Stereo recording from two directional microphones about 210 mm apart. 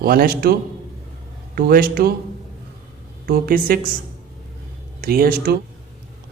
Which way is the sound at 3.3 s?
45° right (ahead or behind).